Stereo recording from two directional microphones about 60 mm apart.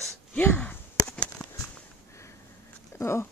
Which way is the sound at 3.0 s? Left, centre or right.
Left.